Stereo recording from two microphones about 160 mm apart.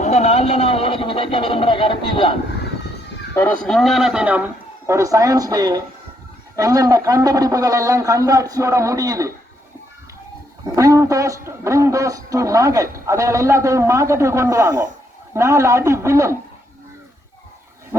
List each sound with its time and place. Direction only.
0.0 s speech: 45° left (ahead or behind)
3.3 s a man's voice: 10° left (ahead or behind); by 9.3 s 20° right (ahead or behind)
10.8 s a man's voice: 20° right (ahead or behind)